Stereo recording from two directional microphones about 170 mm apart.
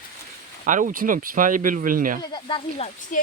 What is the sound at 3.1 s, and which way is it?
Speech, 50° left (ahead or behind).